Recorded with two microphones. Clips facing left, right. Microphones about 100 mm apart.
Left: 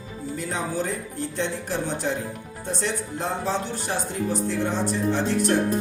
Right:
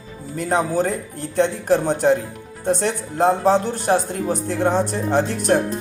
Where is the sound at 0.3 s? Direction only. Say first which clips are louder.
Right 9 dB; 55° right (ahead or behind).